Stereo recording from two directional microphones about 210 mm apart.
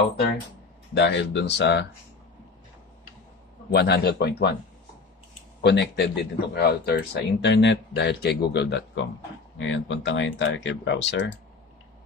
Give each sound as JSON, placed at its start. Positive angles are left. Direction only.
{"t": 0.9, "sound": "speech", "side_deg": 55}
{"t": 3.7, "sound": "speech", "side_deg": 50}
{"t": 5.6, "sound": "speech", "side_deg": 55}